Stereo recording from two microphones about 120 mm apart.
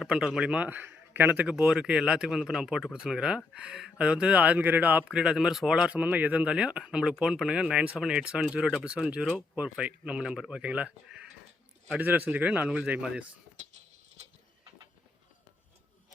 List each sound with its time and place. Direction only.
0.0 s a man's voice: 5° right (ahead or behind)